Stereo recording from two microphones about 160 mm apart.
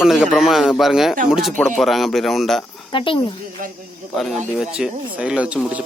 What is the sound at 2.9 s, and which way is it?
Speech, 30° left (ahead or behind).